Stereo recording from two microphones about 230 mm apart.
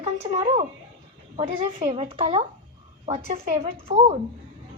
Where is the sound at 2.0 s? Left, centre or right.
Right.